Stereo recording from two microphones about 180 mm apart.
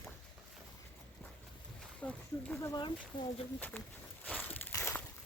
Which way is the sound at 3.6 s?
10° left (ahead or behind).